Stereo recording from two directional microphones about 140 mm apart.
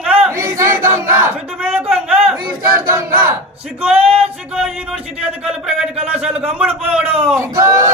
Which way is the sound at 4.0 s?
45° right (ahead or behind).